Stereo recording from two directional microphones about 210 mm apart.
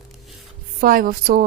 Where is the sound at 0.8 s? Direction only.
40° right (ahead or behind).